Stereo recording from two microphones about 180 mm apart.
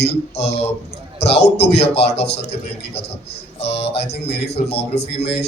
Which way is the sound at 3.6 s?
35° left (ahead or behind).